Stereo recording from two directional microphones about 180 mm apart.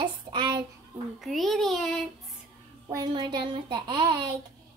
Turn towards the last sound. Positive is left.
turn(degrees=-25)  # may be behind; listen again after turning